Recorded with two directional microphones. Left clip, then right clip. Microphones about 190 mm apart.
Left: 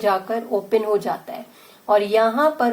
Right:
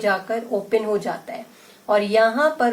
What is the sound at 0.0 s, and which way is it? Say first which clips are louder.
Speech: left 1 dB; 30° left (ahead or behind).